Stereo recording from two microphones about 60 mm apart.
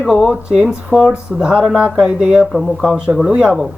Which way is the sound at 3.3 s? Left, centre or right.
Centre.